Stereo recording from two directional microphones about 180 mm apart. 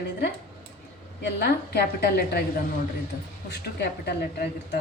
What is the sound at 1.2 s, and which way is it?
A woman's voice, 65° left (ahead or behind).